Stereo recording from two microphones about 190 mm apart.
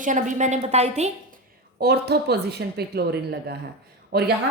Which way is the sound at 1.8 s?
60° right (ahead or behind).